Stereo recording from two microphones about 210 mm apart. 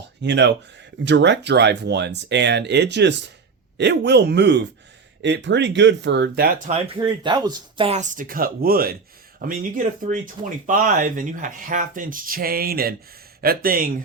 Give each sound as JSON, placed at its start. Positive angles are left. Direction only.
{"t": 0.2, "sound": "speech", "side_deg": -55}
{"t": 6.7, "sound": "speech", "side_deg": -25}